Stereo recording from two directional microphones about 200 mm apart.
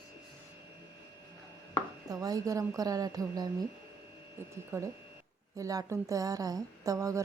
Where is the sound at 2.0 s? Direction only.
20° right (ahead or behind).